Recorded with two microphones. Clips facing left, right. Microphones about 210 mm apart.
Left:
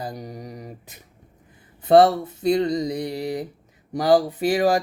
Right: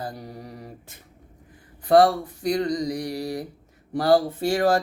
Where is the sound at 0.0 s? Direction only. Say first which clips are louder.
Left 2 dB; 20° left (ahead or behind).